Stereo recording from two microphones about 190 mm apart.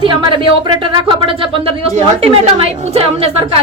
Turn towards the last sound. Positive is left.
turn(degrees=-30)  # may be behind; listen again after turning